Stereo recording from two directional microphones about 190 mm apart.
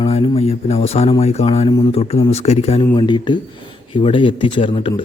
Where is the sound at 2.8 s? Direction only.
25° left (ahead or behind).